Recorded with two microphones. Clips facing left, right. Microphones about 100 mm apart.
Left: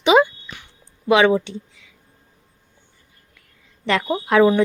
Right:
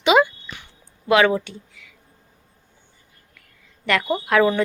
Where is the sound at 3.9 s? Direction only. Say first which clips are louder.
Left 1 dB; 20° left (ahead or behind).